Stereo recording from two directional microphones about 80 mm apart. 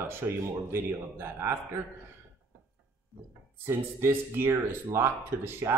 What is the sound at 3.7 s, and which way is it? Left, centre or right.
Speech, right.